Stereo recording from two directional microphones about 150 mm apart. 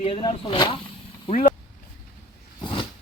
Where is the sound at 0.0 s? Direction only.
35° left (ahead or behind).